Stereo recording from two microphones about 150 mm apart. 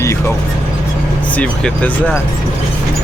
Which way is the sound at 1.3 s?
10° left (ahead or behind).